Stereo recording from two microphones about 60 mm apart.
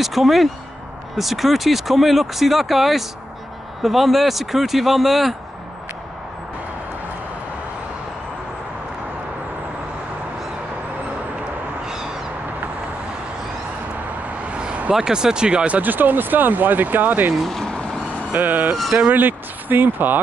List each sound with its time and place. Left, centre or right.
0.0 s speech: centre
11.8 s cat: centre
14.4 s speech: centre
17.5 s speech: centre
18.3 s speech: right